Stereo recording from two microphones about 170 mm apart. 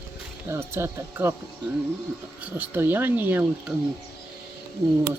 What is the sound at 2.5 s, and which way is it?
Speech, 10° right (ahead or behind).